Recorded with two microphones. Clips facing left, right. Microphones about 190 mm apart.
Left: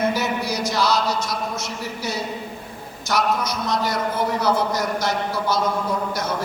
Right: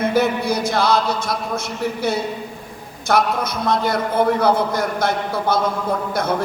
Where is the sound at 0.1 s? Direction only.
55° right (ahead or behind).